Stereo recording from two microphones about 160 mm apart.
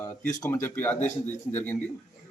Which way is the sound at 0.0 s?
15° left (ahead or behind).